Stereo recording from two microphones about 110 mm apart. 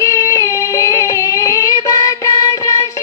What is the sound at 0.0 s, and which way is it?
Music, 30° left (ahead or behind).